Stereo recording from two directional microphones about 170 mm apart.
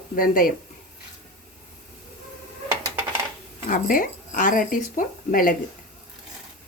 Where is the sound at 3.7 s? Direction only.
55° left (ahead or behind).